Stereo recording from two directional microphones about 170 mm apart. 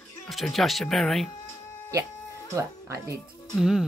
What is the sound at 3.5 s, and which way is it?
Speech, 5° right (ahead or behind).